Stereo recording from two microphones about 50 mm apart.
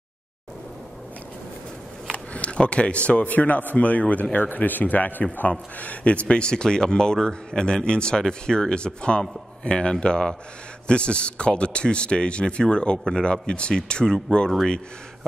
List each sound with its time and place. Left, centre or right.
2.1 s a man's voice: left